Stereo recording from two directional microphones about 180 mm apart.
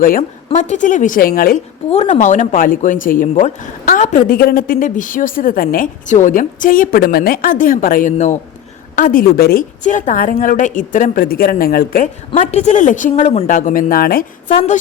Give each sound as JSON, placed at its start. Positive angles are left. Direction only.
{"t": 0.0, "sound": "speech", "side_deg": 50}
{"t": 0.4, "sound": "speech", "side_deg": 40}
{"t": 1.9, "sound": "a woman's voice", "side_deg": 40}
{"t": 9.8, "sound": "speech", "side_deg": 45}
{"t": 12.4, "sound": "speech", "side_deg": 35}